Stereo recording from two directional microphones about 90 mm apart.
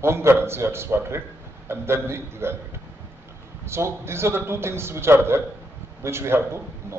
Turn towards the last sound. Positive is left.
turn(degrees=-30)  # may be behind; listen again after turning